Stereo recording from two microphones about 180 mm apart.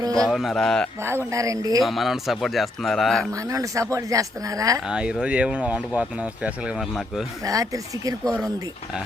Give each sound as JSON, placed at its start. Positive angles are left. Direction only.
{"t": 0.2, "sound": "speech", "side_deg": 0}
{"t": 1.0, "sound": "speech", "side_deg": -15}
{"t": 1.8, "sound": "speech", "side_deg": 0}
{"t": 3.3, "sound": "speech", "side_deg": -15}
{"t": 4.9, "sound": "speech", "side_deg": -5}
{"t": 7.4, "sound": "speech", "side_deg": -20}
{"t": 8.2, "sound": "speech", "side_deg": 5}